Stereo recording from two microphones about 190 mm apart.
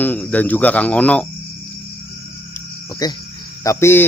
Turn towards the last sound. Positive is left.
turn(degrees=15)  # may be behind; listen again after turning